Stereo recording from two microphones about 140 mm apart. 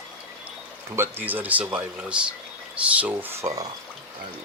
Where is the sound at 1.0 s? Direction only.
15° right (ahead or behind).